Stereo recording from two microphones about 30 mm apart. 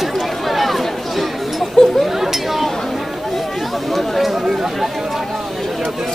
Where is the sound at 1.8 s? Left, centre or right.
Left.